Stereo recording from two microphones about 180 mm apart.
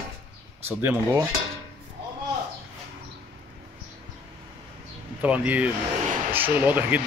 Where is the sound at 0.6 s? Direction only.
10° right (ahead or behind).